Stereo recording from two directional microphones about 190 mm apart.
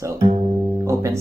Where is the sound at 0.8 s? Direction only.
15° right (ahead or behind).